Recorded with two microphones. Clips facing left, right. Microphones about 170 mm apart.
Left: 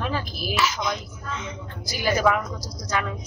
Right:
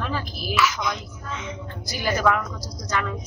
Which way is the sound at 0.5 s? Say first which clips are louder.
Right 2 dB; 30° left (ahead or behind).